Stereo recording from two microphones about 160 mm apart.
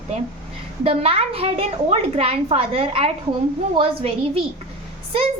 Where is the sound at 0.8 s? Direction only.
35° right (ahead or behind).